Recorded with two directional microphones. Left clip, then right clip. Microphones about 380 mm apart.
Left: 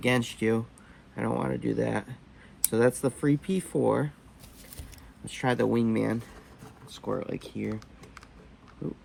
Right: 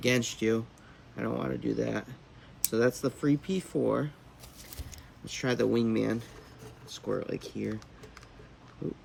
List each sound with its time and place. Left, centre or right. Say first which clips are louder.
0.0 s speech: left 1 dB; centre
5.3 s speech: left 2 dB; centre
7.8 s typing: left 1 dB; centre